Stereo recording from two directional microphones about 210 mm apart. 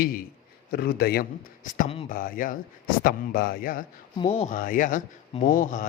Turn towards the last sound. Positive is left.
turn(degrees=40)  # may be behind; listen again after turning